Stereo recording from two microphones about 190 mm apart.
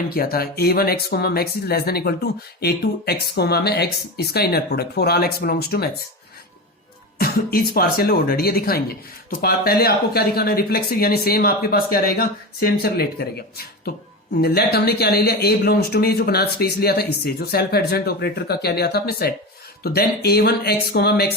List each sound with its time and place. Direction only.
0.1 s speech: 50° left (ahead or behind)
7.2 s speech: 55° left (ahead or behind)